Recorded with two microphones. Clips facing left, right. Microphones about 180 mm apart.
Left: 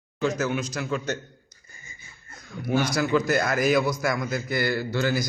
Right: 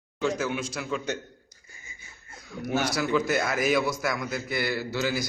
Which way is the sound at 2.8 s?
5° right (ahead or behind).